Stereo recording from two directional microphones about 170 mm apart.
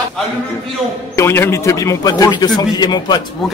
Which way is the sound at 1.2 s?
15° left (ahead or behind).